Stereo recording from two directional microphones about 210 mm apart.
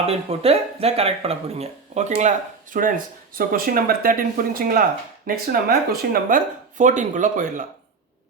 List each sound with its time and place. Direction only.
0.0 s speech: 30° right (ahead or behind)